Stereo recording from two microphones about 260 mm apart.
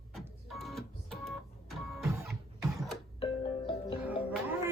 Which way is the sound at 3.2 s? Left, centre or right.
Centre.